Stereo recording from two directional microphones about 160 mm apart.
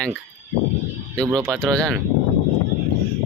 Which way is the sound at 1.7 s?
5° left (ahead or behind).